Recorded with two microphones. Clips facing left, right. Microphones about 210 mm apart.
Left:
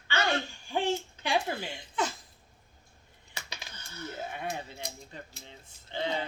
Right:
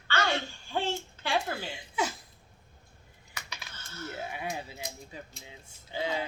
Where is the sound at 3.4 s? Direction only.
25° left (ahead or behind).